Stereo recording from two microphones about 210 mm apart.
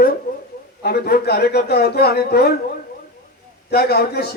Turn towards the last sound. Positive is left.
turn(degrees=50)  # may be behind; listen again after turning